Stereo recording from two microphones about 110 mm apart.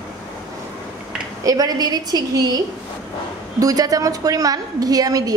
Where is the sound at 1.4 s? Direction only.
35° right (ahead or behind).